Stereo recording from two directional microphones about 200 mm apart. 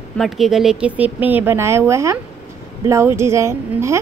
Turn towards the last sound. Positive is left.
turn(degrees=-15)  # may be behind; listen again after turning